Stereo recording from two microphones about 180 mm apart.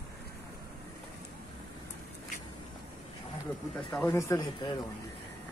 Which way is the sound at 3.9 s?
15° left (ahead or behind).